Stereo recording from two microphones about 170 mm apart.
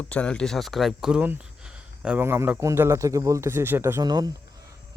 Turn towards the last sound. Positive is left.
turn(degrees=-20)  # may be behind; listen again after turning